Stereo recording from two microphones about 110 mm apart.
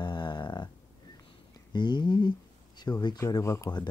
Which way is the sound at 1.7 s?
40° left (ahead or behind).